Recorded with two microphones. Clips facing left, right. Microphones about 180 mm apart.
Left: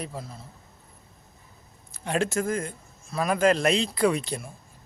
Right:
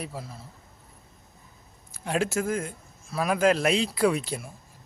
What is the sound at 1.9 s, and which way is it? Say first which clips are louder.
Speech: even; 5° right (ahead or behind).